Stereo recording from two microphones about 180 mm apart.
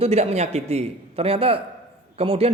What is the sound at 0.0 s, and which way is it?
A man's voice, 35° right (ahead or behind).